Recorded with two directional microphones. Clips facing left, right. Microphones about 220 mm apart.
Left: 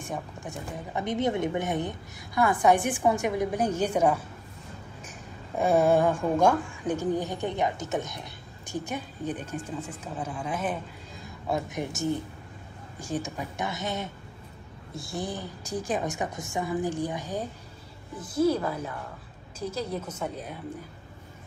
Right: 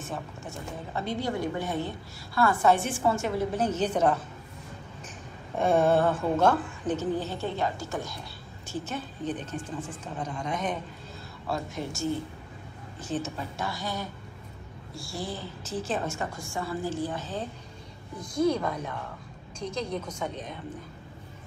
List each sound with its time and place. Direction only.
0.0 s a woman's voice: 15° left (ahead or behind)
5.6 s a woman's voice: 10° left (ahead or behind)
11.4 s a woman's voice: 20° left (ahead or behind)